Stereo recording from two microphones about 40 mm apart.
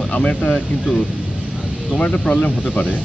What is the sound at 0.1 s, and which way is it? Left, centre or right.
Speech, left.